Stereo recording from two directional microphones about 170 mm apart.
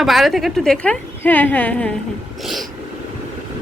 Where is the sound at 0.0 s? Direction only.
Centre (ahead or behind).